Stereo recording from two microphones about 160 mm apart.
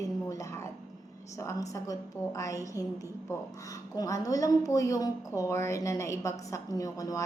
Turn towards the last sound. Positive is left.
turn(degrees=20)  # may be behind; listen again after turning